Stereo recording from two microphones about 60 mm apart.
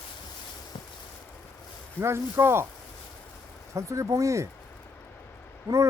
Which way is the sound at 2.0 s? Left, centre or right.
Right.